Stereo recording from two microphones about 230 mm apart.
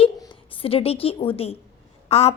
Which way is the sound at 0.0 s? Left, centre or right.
Left.